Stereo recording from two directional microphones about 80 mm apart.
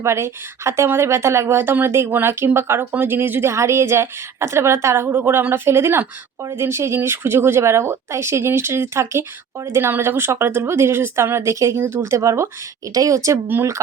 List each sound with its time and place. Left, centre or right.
0.0 s speech: right
3.5 s a woman's voice: right